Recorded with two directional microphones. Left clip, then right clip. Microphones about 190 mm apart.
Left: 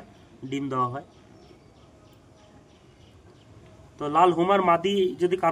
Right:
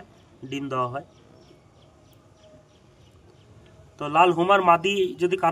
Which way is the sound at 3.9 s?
20° right (ahead or behind).